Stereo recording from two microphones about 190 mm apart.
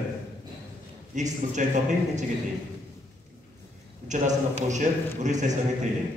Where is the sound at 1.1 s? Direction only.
40° right (ahead or behind).